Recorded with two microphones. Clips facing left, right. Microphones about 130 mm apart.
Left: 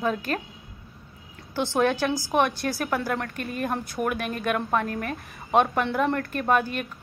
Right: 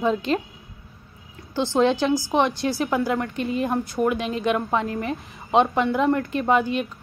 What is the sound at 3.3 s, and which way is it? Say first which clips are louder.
Speech: right 7 dB; 60° left (ahead or behind).